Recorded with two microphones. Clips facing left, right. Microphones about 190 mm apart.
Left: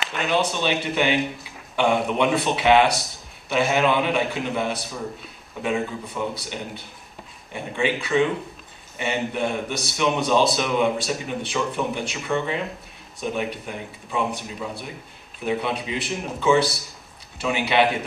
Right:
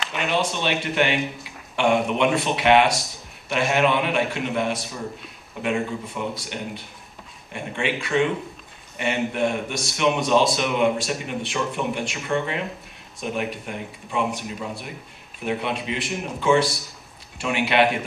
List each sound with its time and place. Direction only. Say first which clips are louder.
0.0 s a man's voice: left 1 dB; centre (ahead or behind)